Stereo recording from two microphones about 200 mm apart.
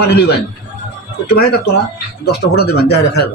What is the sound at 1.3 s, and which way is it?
Speech, 55° left (ahead or behind).